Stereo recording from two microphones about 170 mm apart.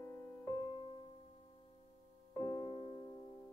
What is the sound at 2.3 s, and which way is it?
Music, 25° left (ahead or behind).